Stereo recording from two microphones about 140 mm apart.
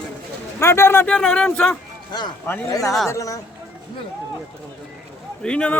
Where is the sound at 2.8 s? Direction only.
Centre (ahead or behind).